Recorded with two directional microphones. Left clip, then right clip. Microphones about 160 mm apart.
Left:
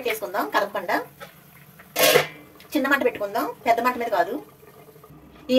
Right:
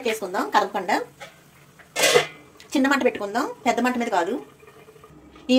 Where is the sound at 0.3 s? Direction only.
35° right (ahead or behind).